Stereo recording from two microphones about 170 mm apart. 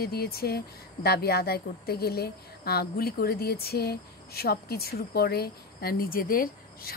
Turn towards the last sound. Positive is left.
turn(degrees=60)  # may be behind; listen again after turning